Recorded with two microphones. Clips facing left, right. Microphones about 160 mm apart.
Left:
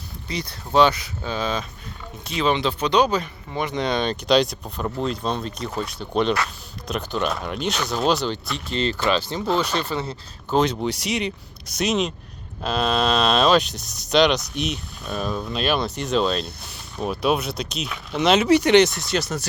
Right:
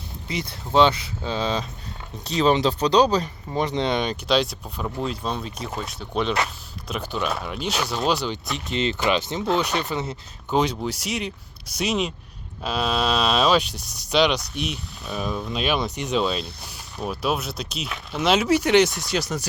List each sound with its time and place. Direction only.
0.3 s speech: 20° right (ahead or behind)
3.8 s speech: 15° right (ahead or behind)
4.3 s speech: 5° right (ahead or behind)